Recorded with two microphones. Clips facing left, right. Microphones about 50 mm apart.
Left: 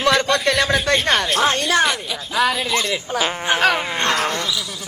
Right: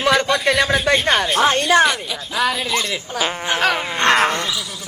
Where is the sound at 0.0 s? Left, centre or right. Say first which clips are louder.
Even; centre.